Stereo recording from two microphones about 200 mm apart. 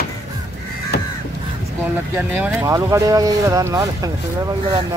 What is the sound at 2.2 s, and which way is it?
Speech, 10° right (ahead or behind).